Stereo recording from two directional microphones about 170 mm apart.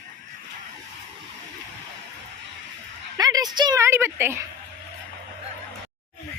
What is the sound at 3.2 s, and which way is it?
A woman's voice, 20° right (ahead or behind).